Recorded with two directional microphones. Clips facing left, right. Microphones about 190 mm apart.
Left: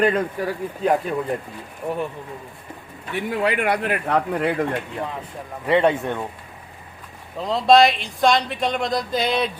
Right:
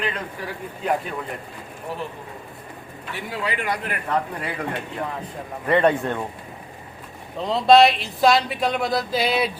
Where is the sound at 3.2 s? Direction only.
60° left (ahead or behind).